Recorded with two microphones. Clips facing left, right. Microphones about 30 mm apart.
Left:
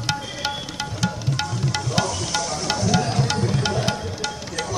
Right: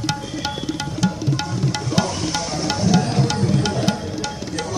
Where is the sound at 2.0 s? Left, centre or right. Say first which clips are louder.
Right 1 dB; centre.